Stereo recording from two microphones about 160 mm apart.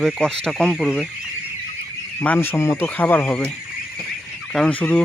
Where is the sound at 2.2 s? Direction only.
10° left (ahead or behind).